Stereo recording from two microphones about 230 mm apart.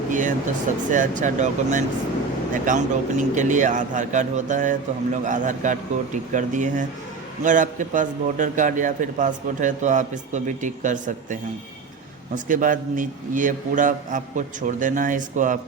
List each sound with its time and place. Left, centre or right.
0.1 s a man's voice: right